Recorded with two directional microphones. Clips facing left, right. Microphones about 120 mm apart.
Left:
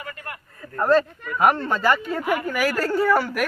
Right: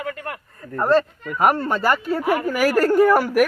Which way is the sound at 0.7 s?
Centre (ahead or behind).